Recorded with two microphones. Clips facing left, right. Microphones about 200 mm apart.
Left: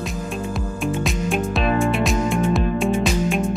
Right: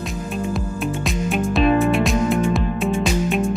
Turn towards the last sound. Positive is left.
turn(degrees=0)  # may be behind; listen again after turning